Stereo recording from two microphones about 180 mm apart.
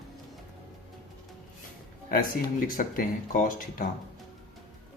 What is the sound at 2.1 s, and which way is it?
Speech, 50° left (ahead or behind).